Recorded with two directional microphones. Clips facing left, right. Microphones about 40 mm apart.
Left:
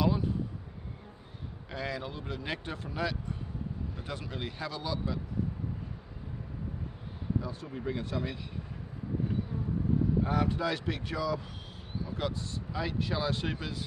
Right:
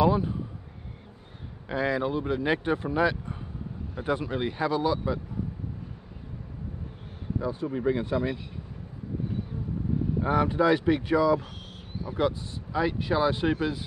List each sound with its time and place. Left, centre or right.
0.0 s speech: centre
1.7 s speech: centre
7.3 s speech: centre
10.2 s speech: centre